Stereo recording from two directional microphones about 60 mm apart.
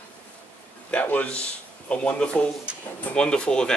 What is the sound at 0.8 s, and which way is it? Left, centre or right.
Speech, left.